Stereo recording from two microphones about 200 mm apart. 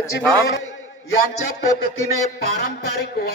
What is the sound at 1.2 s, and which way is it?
Speech, 50° left (ahead or behind).